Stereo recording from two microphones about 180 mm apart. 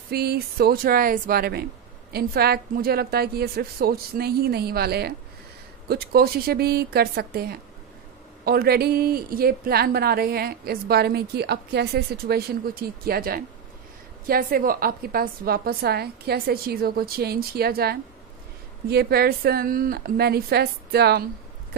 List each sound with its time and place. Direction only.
0.1 s a woman's voice: 60° right (ahead or behind)